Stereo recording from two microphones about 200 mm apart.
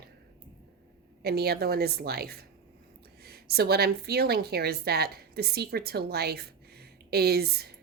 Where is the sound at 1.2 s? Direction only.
50° right (ahead or behind).